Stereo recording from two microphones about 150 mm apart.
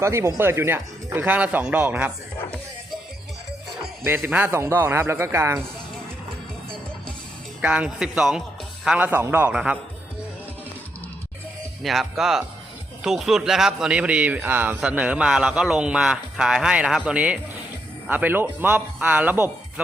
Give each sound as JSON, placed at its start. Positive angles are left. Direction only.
{"t": 0.0, "sound": "speech", "side_deg": -20}
{"t": 4.0, "sound": "speech", "side_deg": -15}
{"t": 7.6, "sound": "speech", "side_deg": -10}
{"t": 11.8, "sound": "speech", "side_deg": 0}